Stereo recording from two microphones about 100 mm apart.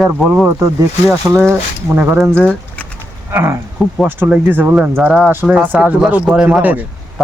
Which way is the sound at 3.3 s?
25° right (ahead or behind).